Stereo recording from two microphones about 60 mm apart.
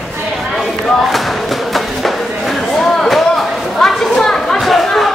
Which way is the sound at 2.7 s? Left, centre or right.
Centre.